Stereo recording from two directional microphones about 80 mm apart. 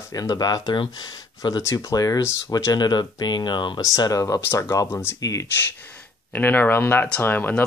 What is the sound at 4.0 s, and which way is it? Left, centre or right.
Speech, left.